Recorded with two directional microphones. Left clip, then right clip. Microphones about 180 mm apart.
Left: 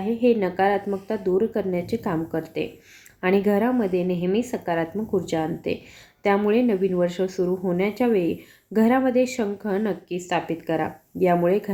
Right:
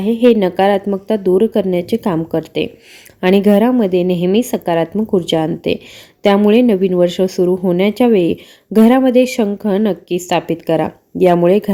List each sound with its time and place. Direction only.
0.0 s speech: 50° right (ahead or behind)